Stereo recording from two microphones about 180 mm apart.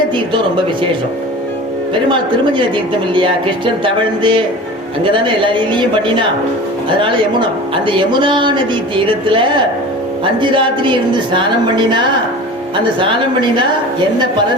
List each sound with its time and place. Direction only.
2.0 s a woman's voice: 25° right (ahead or behind)
3.8 s a woman's voice: 25° right (ahead or behind)
7.9 s a woman's voice: 25° right (ahead or behind)